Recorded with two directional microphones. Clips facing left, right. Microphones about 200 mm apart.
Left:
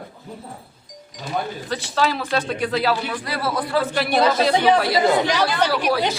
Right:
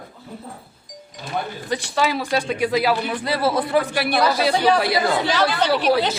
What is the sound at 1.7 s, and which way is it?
Speech, 15° right (ahead or behind).